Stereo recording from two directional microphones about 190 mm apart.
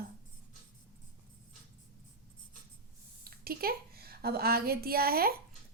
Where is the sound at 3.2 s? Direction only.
50° right (ahead or behind).